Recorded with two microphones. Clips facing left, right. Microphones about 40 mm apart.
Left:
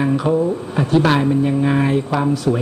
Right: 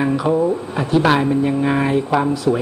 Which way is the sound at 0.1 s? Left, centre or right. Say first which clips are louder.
Even; centre.